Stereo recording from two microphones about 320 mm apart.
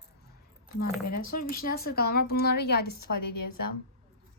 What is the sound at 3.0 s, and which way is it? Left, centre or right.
Speech, left.